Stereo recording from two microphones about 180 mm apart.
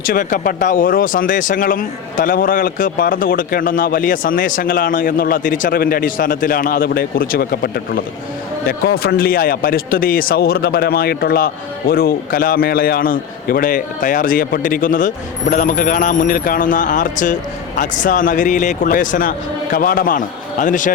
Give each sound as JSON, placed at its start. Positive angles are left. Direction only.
{"t": 0.0, "sound": "a man's voice", "side_deg": 50}